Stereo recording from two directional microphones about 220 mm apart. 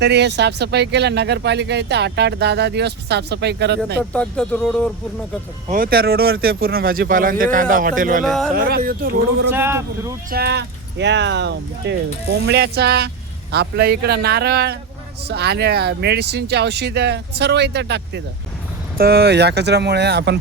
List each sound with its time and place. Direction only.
0.0 s speech: 50° right (ahead or behind)
4.1 s speech: 5° left (ahead or behind)
5.7 s speech: 40° right (ahead or behind)
8.2 s speech: centre (ahead or behind)
8.5 s speech: 40° right (ahead or behind)
9.5 s speech: 10° right (ahead or behind)
10.3 s speech: 50° right (ahead or behind)